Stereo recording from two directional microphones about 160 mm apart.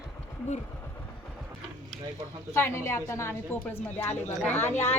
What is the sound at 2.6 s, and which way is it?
A woman's voice, 15° left (ahead or behind).